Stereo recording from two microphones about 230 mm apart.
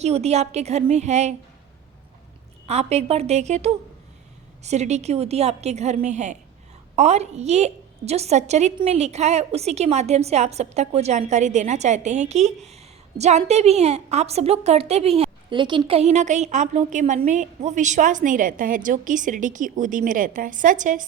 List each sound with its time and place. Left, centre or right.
0.0 s a woman's voice: right
2.6 s a woman's voice: right